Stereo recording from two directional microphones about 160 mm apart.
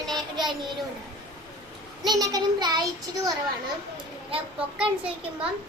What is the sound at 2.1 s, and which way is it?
Speech, 25° right (ahead or behind).